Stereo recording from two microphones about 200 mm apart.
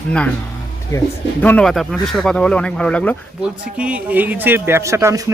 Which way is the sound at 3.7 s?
5° right (ahead or behind).